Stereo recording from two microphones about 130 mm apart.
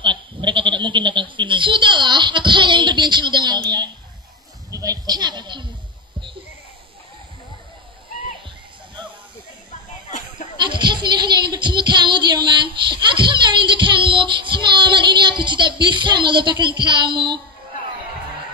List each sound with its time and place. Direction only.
0.0 s goat: 40° right (ahead or behind)
4.6 s a woman's voice: 25° right (ahead or behind)
10.6 s child singing: 35° right (ahead or behind)